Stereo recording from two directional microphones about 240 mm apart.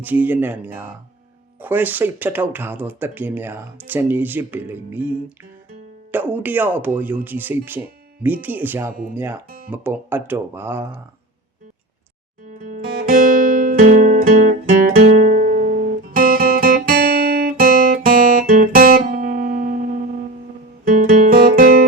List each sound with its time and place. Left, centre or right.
0.0 s speech: centre
12.6 s music: right
16.1 s guitar: right
20.8 s guitar: right